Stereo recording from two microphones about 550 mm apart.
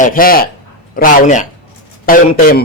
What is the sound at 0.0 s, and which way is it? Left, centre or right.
Speech, centre.